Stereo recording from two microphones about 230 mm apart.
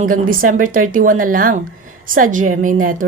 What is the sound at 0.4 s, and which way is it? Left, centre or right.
A woman's voice, right.